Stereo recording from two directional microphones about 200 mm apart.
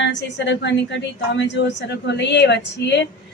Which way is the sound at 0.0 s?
60° left (ahead or behind).